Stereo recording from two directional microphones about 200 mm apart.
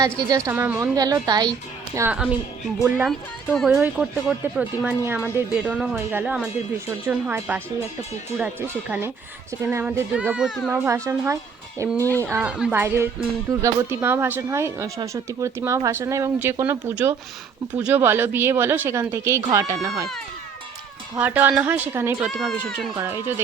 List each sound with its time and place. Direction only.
0.3 s speech: 15° right (ahead or behind)
2.0 s speech: 5° right (ahead or behind)
8.9 s speech: 10° right (ahead or behind)
21.2 s speech: 10° right (ahead or behind)
22.3 s speech: 5° left (ahead or behind)